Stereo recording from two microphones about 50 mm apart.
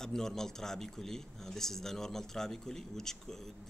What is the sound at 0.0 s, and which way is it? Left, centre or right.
Speech, centre.